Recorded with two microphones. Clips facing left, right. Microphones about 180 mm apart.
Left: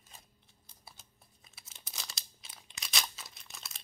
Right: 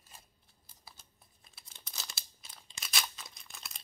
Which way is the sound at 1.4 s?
Centre (ahead or behind).